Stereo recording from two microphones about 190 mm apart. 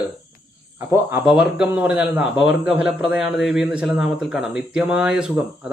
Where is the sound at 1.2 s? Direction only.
5° right (ahead or behind).